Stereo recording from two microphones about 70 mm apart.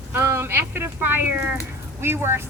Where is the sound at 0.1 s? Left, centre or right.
Right.